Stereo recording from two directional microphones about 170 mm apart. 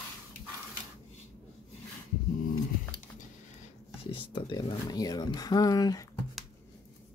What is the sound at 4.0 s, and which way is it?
Speech, 30° left (ahead or behind).